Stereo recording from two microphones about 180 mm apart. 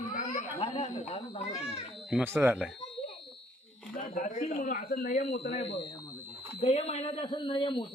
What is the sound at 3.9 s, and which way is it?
Speech, 50° left (ahead or behind).